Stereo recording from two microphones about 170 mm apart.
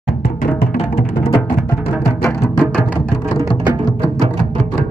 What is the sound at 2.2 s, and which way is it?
Music, 20° left (ahead or behind).